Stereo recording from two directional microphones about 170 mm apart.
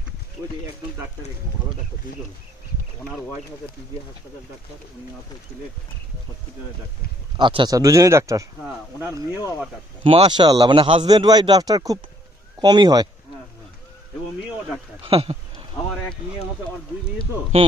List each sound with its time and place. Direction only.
7.3 s speech: 25° right (ahead or behind)
10.0 s speech: 30° right (ahead or behind)
15.0 s speech: 35° right (ahead or behind)